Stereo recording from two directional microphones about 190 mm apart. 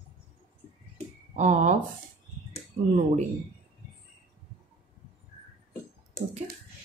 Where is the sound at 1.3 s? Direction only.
40° right (ahead or behind).